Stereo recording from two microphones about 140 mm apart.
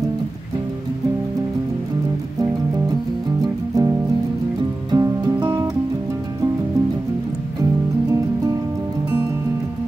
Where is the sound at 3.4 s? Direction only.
25° right (ahead or behind).